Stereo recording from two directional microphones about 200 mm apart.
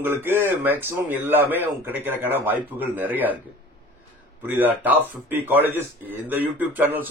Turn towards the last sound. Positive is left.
turn(degrees=-10)  # may be behind; listen again after turning